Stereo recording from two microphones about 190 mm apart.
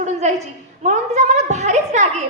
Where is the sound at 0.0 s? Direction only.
35° right (ahead or behind).